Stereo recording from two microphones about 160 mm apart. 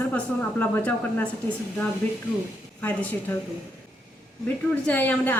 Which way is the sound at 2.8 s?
10° left (ahead or behind).